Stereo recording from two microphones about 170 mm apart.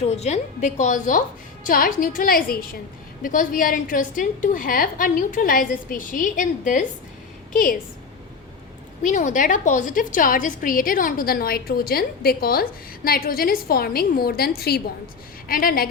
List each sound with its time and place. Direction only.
0.0 s a woman's voice: 40° left (ahead or behind); by 7.8 s 55° left (ahead or behind)
9.0 s a woman's voice: 50° left (ahead or behind)